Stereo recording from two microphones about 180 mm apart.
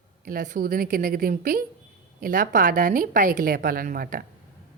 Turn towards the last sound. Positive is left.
turn(degrees=-55)  # may be behind; listen again after turning